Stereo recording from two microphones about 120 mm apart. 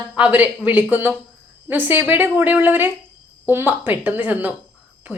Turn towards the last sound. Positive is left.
turn(degrees=-15)  # may be behind; listen again after turning